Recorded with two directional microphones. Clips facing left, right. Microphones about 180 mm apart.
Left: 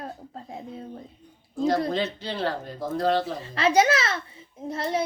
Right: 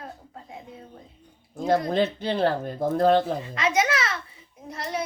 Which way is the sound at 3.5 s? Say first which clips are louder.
Left 5 dB; 30° left (ahead or behind).